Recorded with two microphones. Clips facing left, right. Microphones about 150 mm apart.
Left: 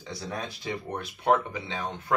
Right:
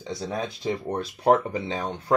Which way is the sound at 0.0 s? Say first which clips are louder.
Right 5 dB; 20° right (ahead or behind).